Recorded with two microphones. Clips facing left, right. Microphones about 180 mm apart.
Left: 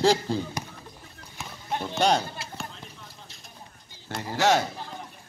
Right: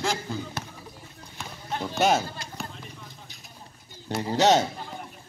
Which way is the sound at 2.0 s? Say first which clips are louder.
Right 1 dB; 5° right (ahead or behind).